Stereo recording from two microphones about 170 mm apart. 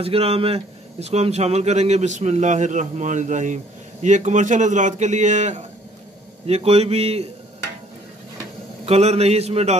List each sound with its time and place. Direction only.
0.0 s a man's voice: 35° right (ahead or behind)
8.8 s a man's voice: 40° right (ahead or behind)